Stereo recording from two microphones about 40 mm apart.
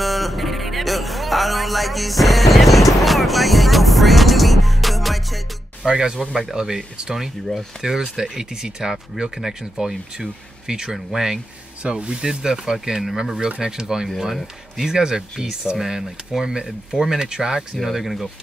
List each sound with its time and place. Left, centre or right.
0.0 s music: centre
5.9 s speech: centre
11.8 s speech: right
14.0 s speech: centre